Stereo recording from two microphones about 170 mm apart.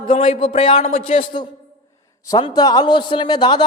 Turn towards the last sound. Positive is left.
turn(degrees=25)  # may be behind; listen again after turning